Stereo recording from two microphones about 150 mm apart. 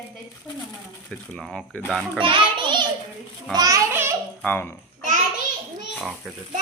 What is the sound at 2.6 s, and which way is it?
A child's voice, 30° right (ahead or behind).